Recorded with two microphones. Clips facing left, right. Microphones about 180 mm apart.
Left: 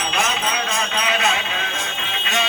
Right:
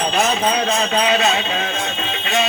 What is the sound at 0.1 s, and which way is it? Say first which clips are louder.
Music: right 4 dB; 35° right (ahead or behind).